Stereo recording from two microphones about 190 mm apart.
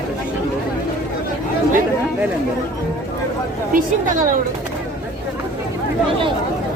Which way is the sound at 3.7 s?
45° right (ahead or behind).